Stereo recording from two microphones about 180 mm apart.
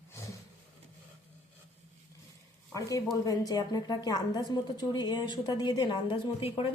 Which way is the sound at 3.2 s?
20° left (ahead or behind).